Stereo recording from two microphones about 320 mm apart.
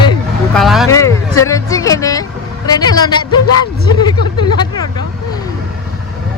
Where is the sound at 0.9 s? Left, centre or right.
Centre.